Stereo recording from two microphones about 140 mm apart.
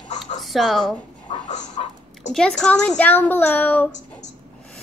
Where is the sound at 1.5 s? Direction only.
55° left (ahead or behind).